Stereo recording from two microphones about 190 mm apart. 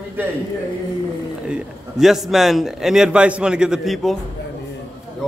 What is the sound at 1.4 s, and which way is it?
A man's voice, 5° right (ahead or behind).